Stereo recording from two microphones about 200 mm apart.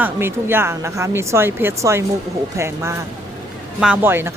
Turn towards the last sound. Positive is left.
turn(degrees=-10)  # may be behind; listen again after turning